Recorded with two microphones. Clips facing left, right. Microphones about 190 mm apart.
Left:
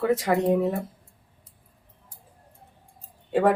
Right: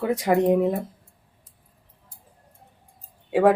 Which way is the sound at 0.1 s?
15° right (ahead or behind).